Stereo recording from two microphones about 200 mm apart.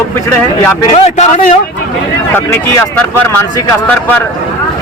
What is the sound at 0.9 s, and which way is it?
Speech, 30° left (ahead or behind).